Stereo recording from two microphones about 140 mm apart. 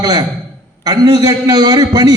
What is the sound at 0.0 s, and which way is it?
A man's voice, 30° right (ahead or behind).